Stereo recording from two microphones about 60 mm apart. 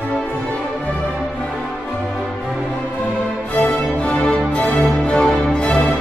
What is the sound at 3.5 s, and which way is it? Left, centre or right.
Music, left.